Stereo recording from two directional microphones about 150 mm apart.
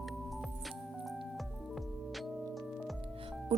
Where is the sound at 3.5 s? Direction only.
40° right (ahead or behind).